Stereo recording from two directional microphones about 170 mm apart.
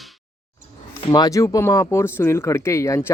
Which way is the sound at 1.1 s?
20° left (ahead or behind).